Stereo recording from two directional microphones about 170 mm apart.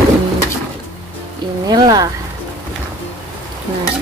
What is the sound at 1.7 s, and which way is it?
Speech, 25° right (ahead or behind).